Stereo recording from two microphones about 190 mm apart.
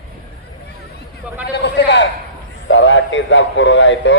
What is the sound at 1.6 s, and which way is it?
Speech, 65° left (ahead or behind).